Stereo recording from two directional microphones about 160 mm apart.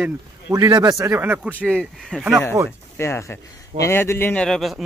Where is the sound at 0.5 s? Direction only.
25° right (ahead or behind); by 1.7 s 10° right (ahead or behind).